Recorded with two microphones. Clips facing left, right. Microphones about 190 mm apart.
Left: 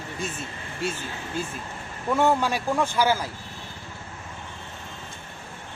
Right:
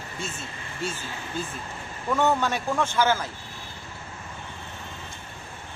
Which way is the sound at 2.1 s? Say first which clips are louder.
Left 1 dB; 10° left (ahead or behind).